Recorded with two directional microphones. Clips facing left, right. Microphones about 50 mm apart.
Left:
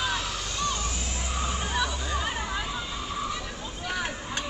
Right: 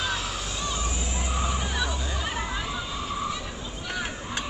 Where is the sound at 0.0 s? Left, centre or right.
Centre.